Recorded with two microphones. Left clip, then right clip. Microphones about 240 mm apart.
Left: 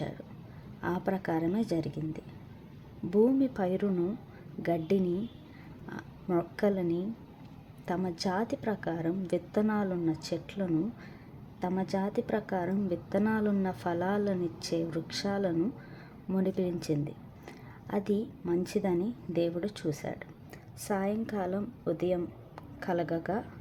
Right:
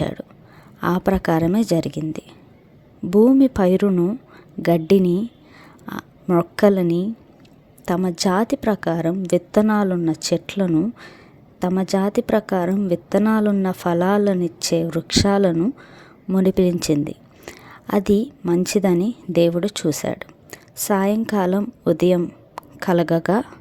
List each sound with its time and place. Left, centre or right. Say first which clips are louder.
0.8 s a woman's voice: right 13 dB; right